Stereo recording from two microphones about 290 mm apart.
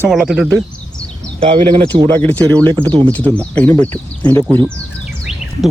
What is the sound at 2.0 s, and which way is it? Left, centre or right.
Speech, centre.